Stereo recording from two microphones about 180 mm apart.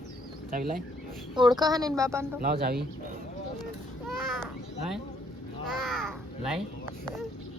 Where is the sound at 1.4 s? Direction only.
20° right (ahead or behind).